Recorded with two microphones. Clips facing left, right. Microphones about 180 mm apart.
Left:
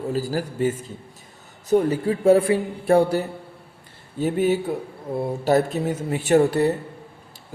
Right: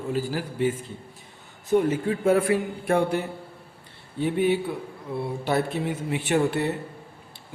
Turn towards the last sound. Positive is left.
turn(degrees=40)  # may be behind; listen again after turning